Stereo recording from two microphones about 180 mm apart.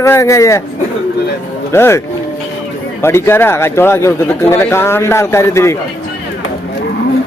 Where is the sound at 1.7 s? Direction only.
15° left (ahead or behind).